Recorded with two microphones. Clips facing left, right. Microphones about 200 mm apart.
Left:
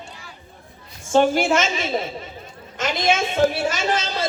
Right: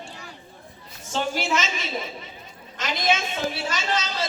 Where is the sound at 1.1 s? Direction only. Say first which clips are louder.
Left 9 dB; 50° left (ahead or behind).